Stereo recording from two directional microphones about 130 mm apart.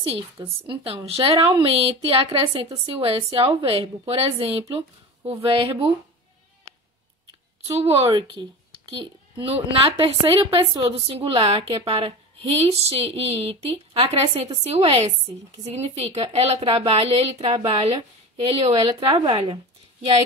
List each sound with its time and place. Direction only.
0.0 s a woman's voice: 45° right (ahead or behind)
7.6 s a woman's voice: 50° right (ahead or behind)